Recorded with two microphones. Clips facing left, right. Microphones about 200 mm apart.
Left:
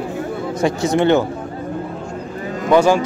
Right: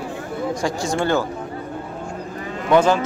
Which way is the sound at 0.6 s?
20° left (ahead or behind).